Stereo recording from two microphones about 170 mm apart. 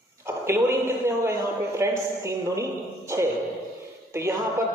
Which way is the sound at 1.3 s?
15° right (ahead or behind).